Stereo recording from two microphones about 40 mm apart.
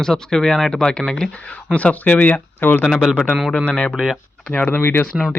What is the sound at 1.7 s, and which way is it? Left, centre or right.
Speech, left.